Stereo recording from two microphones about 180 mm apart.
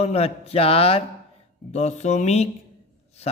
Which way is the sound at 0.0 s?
35° left (ahead or behind).